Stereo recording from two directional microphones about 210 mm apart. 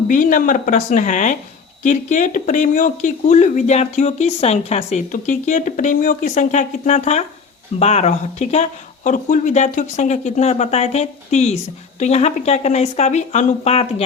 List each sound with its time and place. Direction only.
0.1 s speech: 40° left (ahead or behind)